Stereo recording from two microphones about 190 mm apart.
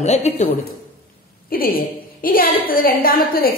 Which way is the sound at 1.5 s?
50° left (ahead or behind).